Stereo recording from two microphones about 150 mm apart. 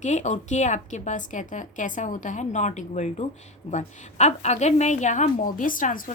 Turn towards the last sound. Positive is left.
turn(degrees=60)  # may be behind; listen again after turning